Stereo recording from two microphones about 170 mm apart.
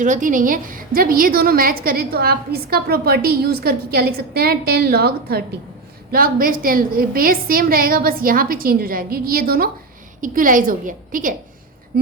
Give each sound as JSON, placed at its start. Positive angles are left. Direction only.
{"t": 0.0, "sound": "a woman's voice", "side_deg": -50}